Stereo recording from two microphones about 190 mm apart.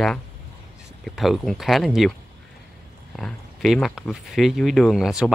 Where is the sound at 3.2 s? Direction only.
5° left (ahead or behind).